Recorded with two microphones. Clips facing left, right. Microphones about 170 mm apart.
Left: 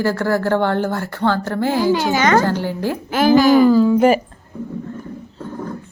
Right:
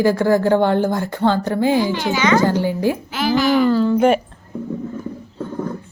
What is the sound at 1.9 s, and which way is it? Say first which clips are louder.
Speech: left 1 dB; 45° left (ahead or behind).